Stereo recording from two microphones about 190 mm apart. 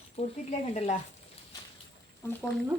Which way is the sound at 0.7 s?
35° left (ahead or behind).